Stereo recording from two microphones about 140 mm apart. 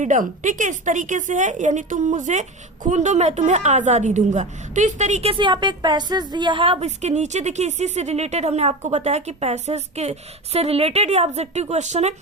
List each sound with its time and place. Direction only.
0.0 s a woman's voice: 65° right (ahead or behind)
5.3 s a woman's voice: 35° right (ahead or behind); by 12.1 s 55° right (ahead or behind)